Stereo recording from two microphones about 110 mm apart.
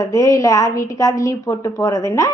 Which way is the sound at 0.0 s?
30° left (ahead or behind).